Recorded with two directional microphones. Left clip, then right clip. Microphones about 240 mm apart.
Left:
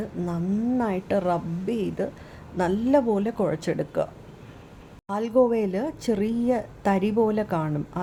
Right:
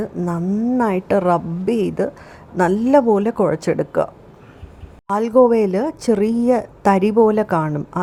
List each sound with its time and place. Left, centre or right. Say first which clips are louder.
0.0 s a woman's voice: right 7 dB; centre